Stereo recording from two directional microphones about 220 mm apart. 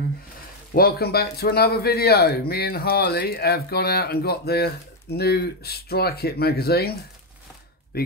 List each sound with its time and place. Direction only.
0.7 s speech: 45° left (ahead or behind)